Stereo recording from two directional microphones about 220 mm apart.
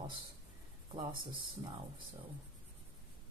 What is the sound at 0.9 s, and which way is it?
Speech, 20° right (ahead or behind).